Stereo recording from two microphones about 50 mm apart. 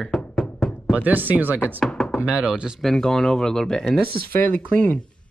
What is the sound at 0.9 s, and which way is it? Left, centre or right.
Speech, right.